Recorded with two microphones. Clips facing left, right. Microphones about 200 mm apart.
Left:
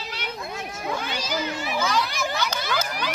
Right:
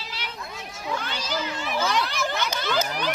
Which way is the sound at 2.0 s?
10° left (ahead or behind).